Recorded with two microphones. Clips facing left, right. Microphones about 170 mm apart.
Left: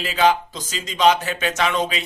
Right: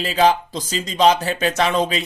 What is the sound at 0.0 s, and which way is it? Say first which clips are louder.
Speech: right 2 dB; 35° right (ahead or behind).